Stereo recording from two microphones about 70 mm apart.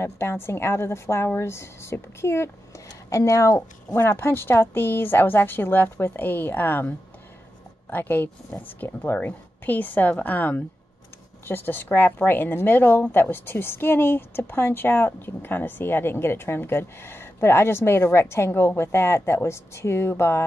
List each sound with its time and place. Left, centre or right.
0.0 s a woman's voice: left
2.9 s a woman's voice: left
4.2 s a woman's voice: left
7.9 s a woman's voice: left